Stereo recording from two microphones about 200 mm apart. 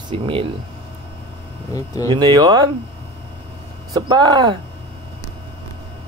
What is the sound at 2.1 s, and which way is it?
Speech, 25° right (ahead or behind).